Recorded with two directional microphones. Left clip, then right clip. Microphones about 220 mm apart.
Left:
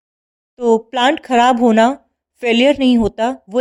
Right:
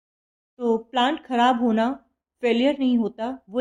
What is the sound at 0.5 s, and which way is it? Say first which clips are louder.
Speech: left 8 dB; 50° left (ahead or behind).